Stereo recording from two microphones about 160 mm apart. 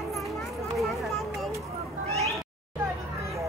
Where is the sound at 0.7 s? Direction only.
Centre (ahead or behind).